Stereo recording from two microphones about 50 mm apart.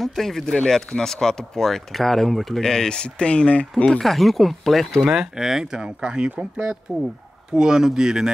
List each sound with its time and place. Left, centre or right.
0.0 s speech: centre; by 3.6 s left
4.0 s speech: centre
5.0 s speech: centre